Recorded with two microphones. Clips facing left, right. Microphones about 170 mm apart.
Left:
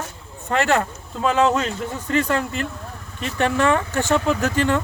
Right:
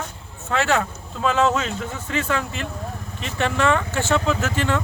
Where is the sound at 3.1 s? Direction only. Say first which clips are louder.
Left 3 dB; 50° left (ahead or behind).